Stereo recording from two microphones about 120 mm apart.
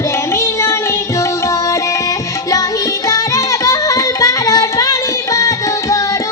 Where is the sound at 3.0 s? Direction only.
25° left (ahead or behind).